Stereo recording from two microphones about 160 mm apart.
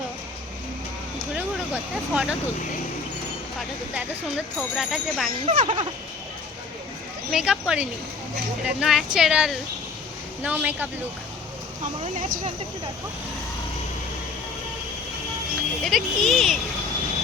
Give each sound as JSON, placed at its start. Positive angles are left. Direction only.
{"t": 1.4, "sound": "vehicle", "side_deg": -10}
{"t": 4.5, "sound": "speech", "side_deg": 0}
{"t": 5.5, "sound": "speech", "side_deg": -35}
{"t": 7.3, "sound": "speech", "side_deg": -5}
{"t": 12.0, "sound": "speech", "side_deg": -55}
{"t": 15.8, "sound": "speech", "side_deg": 0}